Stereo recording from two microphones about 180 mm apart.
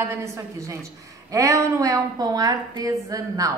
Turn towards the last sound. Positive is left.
turn(degrees=-20)  # may be behind; listen again after turning